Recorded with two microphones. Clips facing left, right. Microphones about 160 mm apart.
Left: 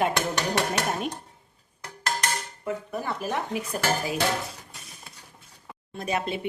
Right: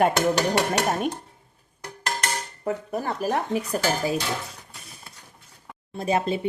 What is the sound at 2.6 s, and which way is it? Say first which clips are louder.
Speech: right 4 dB; 40° right (ahead or behind).